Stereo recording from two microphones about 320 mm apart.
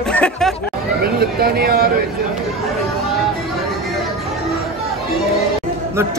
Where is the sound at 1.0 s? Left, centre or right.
Right.